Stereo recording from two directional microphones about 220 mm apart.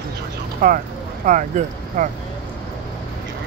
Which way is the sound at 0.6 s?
40° right (ahead or behind).